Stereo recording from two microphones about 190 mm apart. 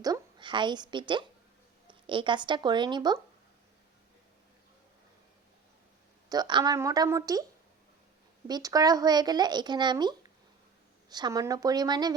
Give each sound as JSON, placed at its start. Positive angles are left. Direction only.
{"t": 0.0, "sound": "a woman's voice", "side_deg": -20}
{"t": 6.2, "sound": "speech", "side_deg": -20}
{"t": 8.4, "sound": "speech", "side_deg": -20}